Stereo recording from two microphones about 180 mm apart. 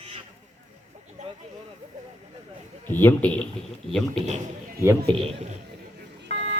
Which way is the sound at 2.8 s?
10° left (ahead or behind).